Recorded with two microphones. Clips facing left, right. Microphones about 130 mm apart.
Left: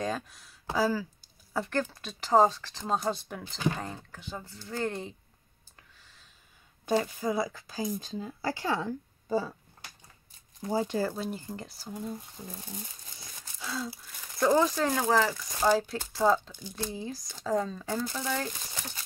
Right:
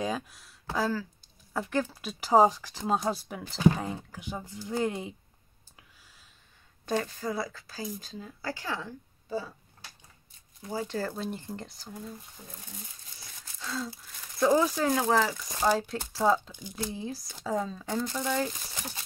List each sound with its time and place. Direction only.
0.0 s speech: centre (ahead or behind)
6.9 s a woman's voice: 10° left (ahead or behind); by 8.7 s 30° left (ahead or behind)
10.7 s a woman's voice: 25° left (ahead or behind)
11.0 s speech: 5° left (ahead or behind)
11.9 s a woman's voice: 20° left (ahead or behind)
13.6 s speech: 5° left (ahead or behind)
14.4 s speech: 5° right (ahead or behind)